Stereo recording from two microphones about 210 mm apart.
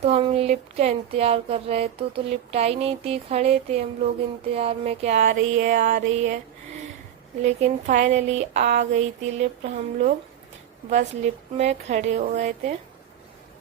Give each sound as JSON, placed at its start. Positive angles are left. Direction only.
{"t": 0.0, "sound": "speech", "side_deg": -30}
{"t": 7.4, "sound": "speech", "side_deg": -35}
{"t": 11.5, "sound": "speech", "side_deg": -30}